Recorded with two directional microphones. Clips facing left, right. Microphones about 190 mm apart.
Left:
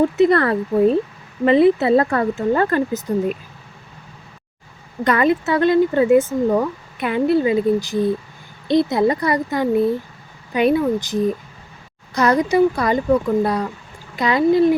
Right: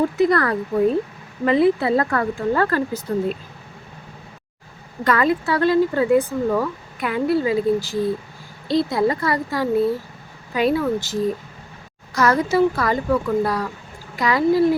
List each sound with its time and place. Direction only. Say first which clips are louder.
0.2 s speech: left 3 dB; 25° left (ahead or behind)
5.0 s speech: left 2 dB; 20° left (ahead or behind)